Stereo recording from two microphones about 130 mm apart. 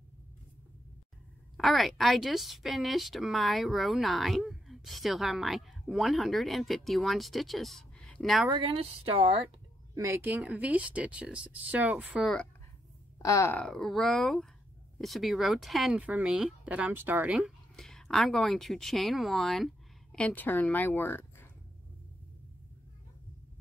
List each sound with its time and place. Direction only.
1.6 s a woman's voice: centre (ahead or behind)
8.5 s a woman's voice: 40° right (ahead or behind)
9.9 s speech: 20° right (ahead or behind)
13.2 s speech: 25° left (ahead or behind)
13.6 s a woman's voice: 5° left (ahead or behind); by 17.4 s 15° right (ahead or behind)
17.4 s speech: 5° left (ahead or behind)